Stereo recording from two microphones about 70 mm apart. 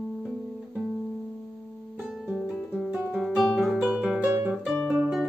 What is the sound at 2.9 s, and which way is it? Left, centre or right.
Guitar, right.